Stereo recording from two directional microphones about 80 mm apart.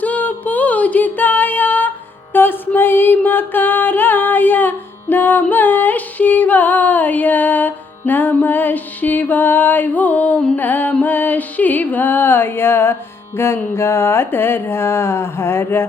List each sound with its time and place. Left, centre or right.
0.0 s music: centre